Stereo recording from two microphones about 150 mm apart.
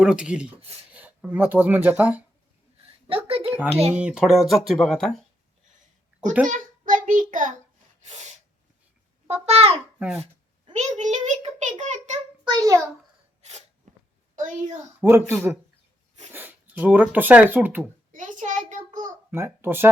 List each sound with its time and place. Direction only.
0.0 s a child's voice: 5° right (ahead or behind)
3.1 s a sound: 40° right (ahead or behind)
3.7 s speech: 45° right (ahead or behind)
3.9 s speech: 5° right (ahead or behind)
6.5 s child singing: 60° right (ahead or behind)
8.0 s sneeze: 50° right (ahead or behind)
9.2 s babbling: 40° right (ahead or behind)
10.7 s a sound: 50° right (ahead or behind)
12.5 s a child's voice: 25° right (ahead or behind)
13.9 s a sound: 55° right (ahead or behind)
14.3 s a woman's voice: 55° right (ahead or behind)
15.0 s a child's voice: 15° right (ahead or behind)
18.1 s a child's voice: 55° right (ahead or behind)
19.3 s a child's voice: 15° right (ahead or behind)